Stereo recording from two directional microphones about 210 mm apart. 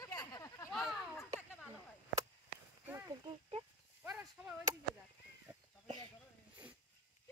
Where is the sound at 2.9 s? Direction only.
15° right (ahead or behind).